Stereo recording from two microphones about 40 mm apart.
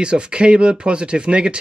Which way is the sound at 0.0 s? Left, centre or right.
Right.